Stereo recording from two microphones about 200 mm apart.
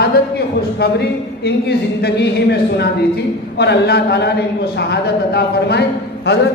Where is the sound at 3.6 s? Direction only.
55° left (ahead or behind).